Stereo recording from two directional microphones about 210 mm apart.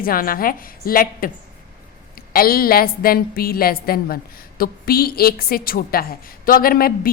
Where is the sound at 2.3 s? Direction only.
45° left (ahead or behind).